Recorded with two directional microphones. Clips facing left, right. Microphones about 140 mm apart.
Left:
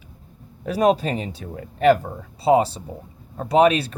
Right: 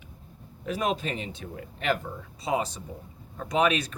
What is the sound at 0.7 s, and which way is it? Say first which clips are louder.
Speech: left 10 dB; 40° left (ahead or behind).